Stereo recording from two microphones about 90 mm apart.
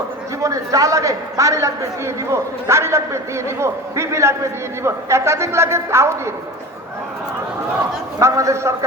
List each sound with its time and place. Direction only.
0.4 s a man's voice: 40° right (ahead or behind)
8.2 s a man's voice: 35° right (ahead or behind)